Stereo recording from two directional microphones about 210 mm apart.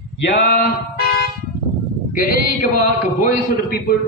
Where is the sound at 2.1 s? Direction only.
40° left (ahead or behind).